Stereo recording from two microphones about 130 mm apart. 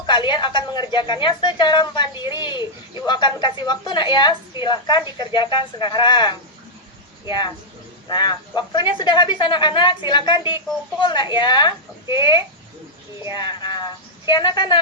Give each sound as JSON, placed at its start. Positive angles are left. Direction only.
{"t": 0.0, "sound": "a woman's voice", "side_deg": 35}
{"t": 13.5, "sound": "speech", "side_deg": 35}